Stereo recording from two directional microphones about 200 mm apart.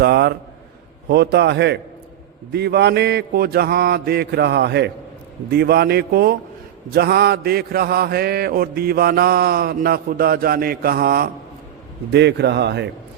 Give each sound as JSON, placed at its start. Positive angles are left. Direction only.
{"t": 0.0, "sound": "mantra", "side_deg": -55}